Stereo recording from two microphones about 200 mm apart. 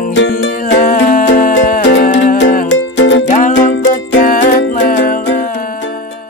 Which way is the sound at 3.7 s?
70° left (ahead or behind).